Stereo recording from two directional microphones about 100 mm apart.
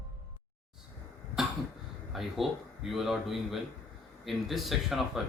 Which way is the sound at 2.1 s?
5° right (ahead or behind).